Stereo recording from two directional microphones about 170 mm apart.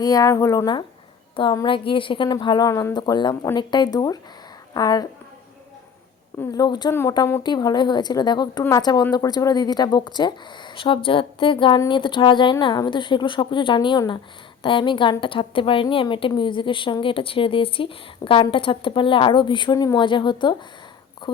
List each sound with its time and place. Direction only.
0.0 s a woman's voice: 20° left (ahead or behind)
6.4 s a woman's voice: 20° left (ahead or behind)